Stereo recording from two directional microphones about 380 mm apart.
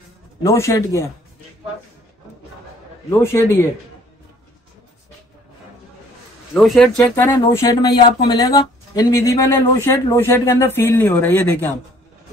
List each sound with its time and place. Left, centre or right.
0.4 s speech: centre
3.1 s speech: centre
6.5 s speech: centre